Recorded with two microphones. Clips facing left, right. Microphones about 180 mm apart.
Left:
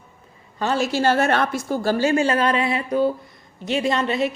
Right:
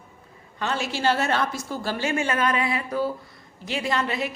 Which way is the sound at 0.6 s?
40° left (ahead or behind).